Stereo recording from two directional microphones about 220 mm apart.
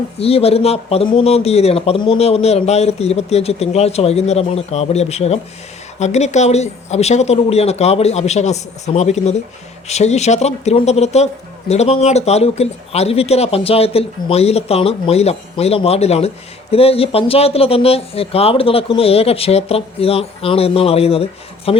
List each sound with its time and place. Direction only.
0.2 s a man's voice: 25° left (ahead or behind)